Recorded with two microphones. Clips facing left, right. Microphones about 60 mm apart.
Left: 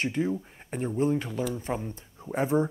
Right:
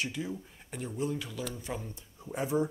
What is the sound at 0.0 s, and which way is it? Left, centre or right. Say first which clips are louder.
Speech: left 8 dB; left.